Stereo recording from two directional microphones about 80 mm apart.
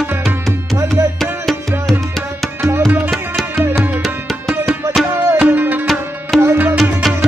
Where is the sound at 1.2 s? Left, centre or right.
Centre.